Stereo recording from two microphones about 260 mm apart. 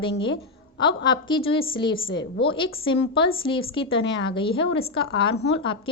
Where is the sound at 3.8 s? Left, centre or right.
Left.